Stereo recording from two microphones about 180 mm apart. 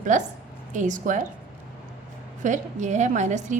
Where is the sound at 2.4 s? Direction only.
45° right (ahead or behind).